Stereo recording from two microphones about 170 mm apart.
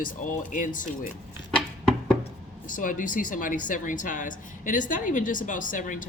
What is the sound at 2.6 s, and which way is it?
Speech, 50° left (ahead or behind).